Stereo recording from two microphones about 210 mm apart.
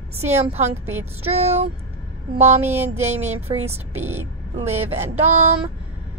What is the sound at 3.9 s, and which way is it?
Speech, 10° right (ahead or behind).